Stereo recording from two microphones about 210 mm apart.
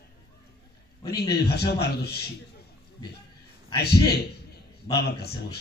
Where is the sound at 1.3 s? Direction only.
50° left (ahead or behind).